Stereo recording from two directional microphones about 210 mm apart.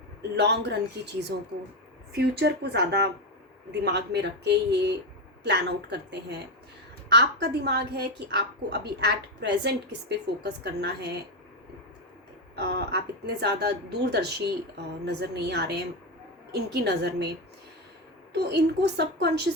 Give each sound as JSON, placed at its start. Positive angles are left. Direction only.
{"t": 0.2, "sound": "a woman's voice", "side_deg": -55}
{"t": 12.5, "sound": "a woman's voice", "side_deg": -50}
{"t": 18.3, "sound": "a woman's voice", "side_deg": -50}